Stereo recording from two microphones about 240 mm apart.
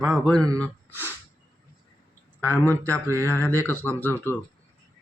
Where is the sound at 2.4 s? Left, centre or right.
Centre.